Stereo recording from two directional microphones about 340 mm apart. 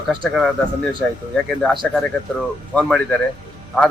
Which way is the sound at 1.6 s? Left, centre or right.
Centre.